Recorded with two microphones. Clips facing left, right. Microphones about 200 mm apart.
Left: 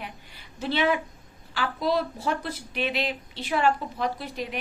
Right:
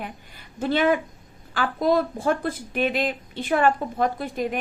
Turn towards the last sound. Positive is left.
turn(degrees=-50)  # may be behind; listen again after turning